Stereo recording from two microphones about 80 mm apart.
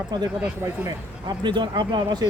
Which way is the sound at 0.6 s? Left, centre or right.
Right.